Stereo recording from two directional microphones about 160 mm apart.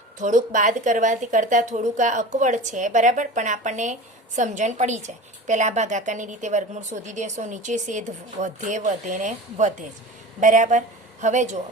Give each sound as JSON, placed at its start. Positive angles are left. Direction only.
{"t": 0.2, "sound": "a woman's voice", "side_deg": -50}